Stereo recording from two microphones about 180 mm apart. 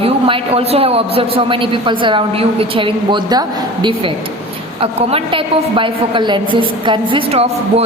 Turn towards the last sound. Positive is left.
turn(degrees=-30)  # may be behind; listen again after turning